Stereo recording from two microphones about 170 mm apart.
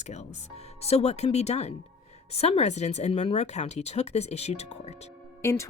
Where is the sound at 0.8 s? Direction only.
35° left (ahead or behind).